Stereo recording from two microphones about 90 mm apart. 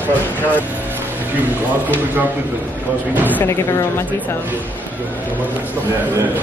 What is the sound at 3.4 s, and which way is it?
Speech, 30° left (ahead or behind).